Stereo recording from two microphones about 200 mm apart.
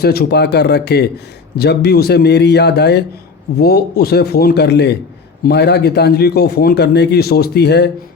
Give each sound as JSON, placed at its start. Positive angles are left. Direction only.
{"t": 0.0, "sound": "a man's voice", "side_deg": 50}